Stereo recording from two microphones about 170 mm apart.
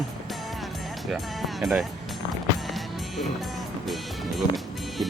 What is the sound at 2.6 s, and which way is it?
Music, centre (ahead or behind).